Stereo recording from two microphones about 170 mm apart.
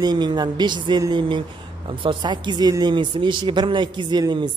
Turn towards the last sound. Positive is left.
turn(degrees=-25)  # may be behind; listen again after turning